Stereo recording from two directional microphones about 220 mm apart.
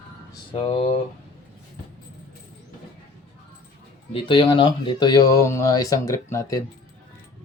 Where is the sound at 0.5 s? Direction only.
25° left (ahead or behind).